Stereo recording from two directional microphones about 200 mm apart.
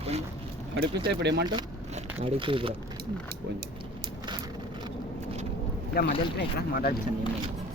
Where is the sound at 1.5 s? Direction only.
30° right (ahead or behind).